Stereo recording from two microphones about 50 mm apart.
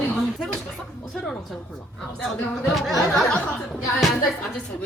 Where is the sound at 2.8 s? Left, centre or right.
Centre.